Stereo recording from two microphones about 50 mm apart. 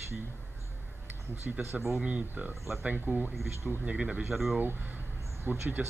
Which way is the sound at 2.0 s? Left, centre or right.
Right.